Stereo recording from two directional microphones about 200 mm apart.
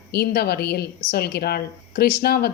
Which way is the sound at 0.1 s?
55° left (ahead or behind).